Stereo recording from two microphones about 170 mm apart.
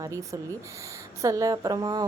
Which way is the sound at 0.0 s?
20° right (ahead or behind).